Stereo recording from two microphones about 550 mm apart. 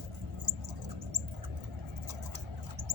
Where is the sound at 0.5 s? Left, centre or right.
Right.